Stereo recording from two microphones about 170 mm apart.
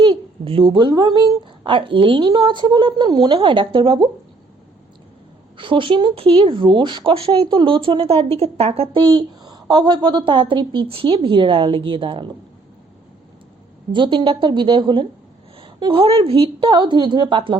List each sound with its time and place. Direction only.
0.0 s speech: 30° right (ahead or behind)
5.5 s speech: 30° right (ahead or behind)
13.9 s speech: 30° right (ahead or behind)